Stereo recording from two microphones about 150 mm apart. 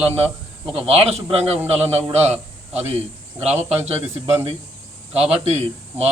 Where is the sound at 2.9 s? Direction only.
45° right (ahead or behind).